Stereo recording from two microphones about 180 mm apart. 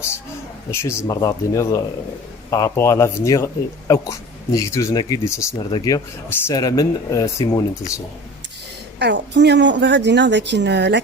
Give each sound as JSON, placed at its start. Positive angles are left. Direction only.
{"t": 0.7, "sound": "speech", "side_deg": 15}
{"t": 9.0, "sound": "speech", "side_deg": -70}